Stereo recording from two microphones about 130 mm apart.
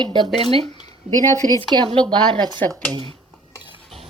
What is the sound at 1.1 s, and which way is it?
Speech, 5° right (ahead or behind).